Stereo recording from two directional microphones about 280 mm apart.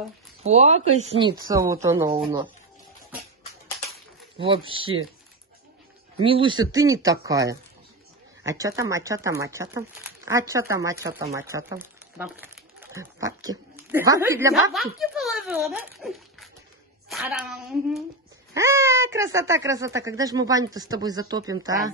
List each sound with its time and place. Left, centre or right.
0.4 s speech: right
6.2 s a child's voice: centre